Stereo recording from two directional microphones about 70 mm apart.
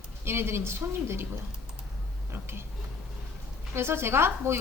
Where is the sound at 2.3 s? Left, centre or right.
Right.